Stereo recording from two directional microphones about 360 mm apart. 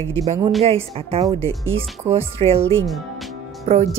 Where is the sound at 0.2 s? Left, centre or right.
Centre.